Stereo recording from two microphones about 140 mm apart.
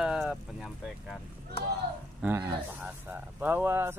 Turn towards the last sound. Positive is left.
turn(degrees=-15)  # may be behind; listen again after turning